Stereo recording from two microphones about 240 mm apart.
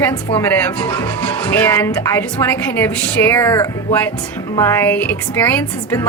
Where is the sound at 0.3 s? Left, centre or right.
Centre.